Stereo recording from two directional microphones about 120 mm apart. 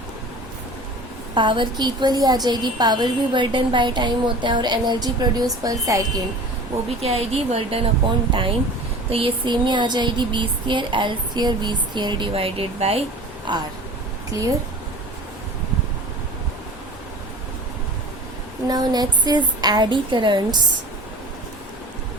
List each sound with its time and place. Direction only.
1.4 s a woman's voice: 40° right (ahead or behind)
7.0 s a woman's voice: 60° right (ahead or behind)
9.0 s a woman's voice: 50° right (ahead or behind)
13.5 s a woman's voice: 40° right (ahead or behind)
18.7 s a woman's voice: 35° right (ahead or behind)